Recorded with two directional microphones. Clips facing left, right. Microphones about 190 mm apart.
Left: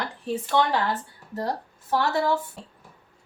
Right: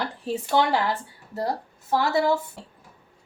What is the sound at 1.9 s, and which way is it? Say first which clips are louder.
Speech: right 2 dB; 10° right (ahead or behind).